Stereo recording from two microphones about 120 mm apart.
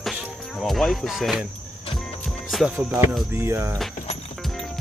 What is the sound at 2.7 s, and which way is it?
Music, 15° right (ahead or behind).